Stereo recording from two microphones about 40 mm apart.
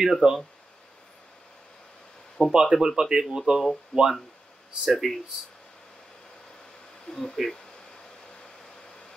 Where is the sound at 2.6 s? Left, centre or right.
Centre.